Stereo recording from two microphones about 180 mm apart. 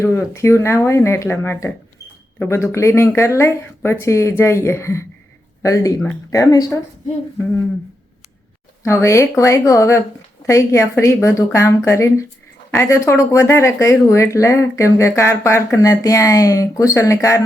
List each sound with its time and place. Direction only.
0.0 s speech: 15° left (ahead or behind)
8.8 s speech: 15° left (ahead or behind)